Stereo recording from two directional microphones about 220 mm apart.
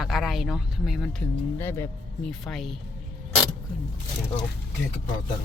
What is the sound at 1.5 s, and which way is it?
Speech, 10° left (ahead or behind).